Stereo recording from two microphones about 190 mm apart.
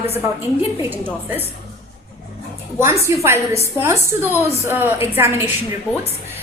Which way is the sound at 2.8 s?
15° right (ahead or behind).